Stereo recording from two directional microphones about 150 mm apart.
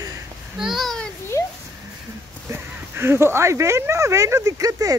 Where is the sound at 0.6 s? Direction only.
Centre (ahead or behind).